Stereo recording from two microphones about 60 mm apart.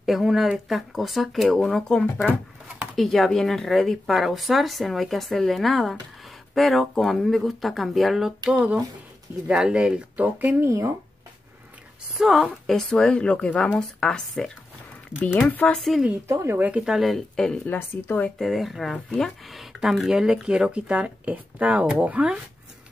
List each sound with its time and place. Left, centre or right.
0.0 s speech: centre
3.0 s speech: centre
8.5 s speech: centre
10.1 s speech: right
10.6 s speech: right
12.1 s speech: centre
12.6 s speech: centre
15.1 s a woman's voice: left
15.7 s speech: centre
16.3 s speech: right
16.7 s speech: centre
17.6 s a woman's voice: left
18.4 s speech: centre